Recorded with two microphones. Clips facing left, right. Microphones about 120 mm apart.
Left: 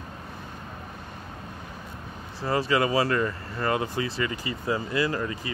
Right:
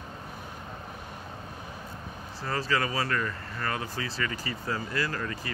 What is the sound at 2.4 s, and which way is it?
Speech, 20° left (ahead or behind).